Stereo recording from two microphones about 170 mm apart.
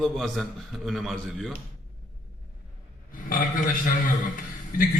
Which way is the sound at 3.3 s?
55° left (ahead or behind).